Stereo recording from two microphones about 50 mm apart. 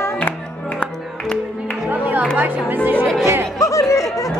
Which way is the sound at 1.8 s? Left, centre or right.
Right.